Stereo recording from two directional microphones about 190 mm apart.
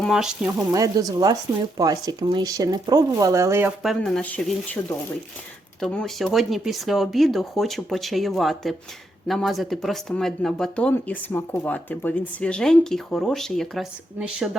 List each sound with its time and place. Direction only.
0.0 s speech: centre (ahead or behind)
0.7 s speech: 20° right (ahead or behind)
3.8 s speech: 5° left (ahead or behind)